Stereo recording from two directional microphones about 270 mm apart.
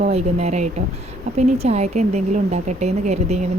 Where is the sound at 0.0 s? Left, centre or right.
Right.